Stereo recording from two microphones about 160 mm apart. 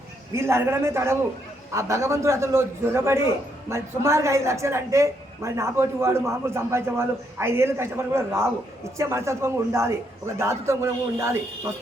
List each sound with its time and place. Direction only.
0.3 s a woman's voice: 15° right (ahead or behind)